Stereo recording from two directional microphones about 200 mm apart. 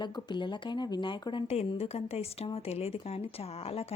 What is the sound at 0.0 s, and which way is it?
A woman's voice, 20° left (ahead or behind).